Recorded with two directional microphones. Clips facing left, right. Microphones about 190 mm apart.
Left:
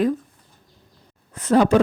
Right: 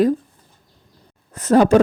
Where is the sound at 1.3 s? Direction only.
45° right (ahead or behind).